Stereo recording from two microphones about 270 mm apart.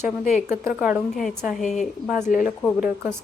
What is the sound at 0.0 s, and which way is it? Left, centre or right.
Speech, left.